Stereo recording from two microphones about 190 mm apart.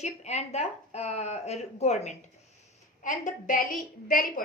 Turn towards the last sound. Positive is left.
turn(degrees=45)  # may be behind; listen again after turning